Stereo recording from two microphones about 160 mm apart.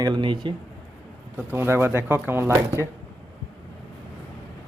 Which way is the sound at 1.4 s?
15° right (ahead or behind).